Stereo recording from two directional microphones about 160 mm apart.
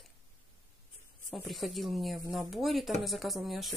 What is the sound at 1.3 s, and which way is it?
Speech, centre (ahead or behind).